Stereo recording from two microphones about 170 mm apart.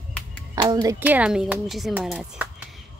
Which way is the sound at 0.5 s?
25° right (ahead or behind).